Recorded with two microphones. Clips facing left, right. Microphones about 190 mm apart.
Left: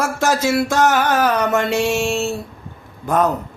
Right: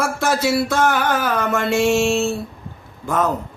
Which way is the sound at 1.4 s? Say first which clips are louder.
Left 1 dB; 20° left (ahead or behind).